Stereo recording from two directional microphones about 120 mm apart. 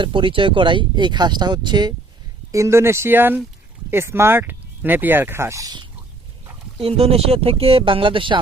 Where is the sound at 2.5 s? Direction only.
25° right (ahead or behind).